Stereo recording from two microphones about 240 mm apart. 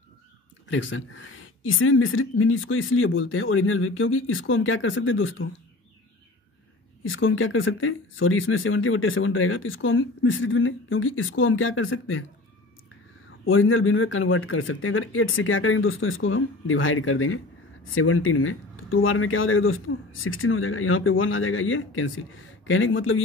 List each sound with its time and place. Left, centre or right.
0.7 s speech: left
7.0 s speech: left
13.5 s speech: left